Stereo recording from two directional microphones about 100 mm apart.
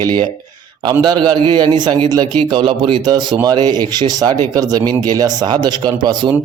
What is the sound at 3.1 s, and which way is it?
Speech, 45° right (ahead or behind).